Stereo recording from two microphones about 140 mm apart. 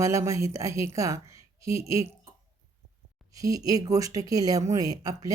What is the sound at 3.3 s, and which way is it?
Speech, 25° right (ahead or behind).